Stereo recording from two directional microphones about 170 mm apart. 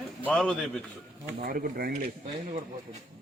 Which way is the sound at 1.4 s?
60° right (ahead or behind).